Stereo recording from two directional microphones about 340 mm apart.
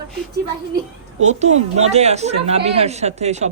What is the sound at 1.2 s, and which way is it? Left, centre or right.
A man's voice, centre.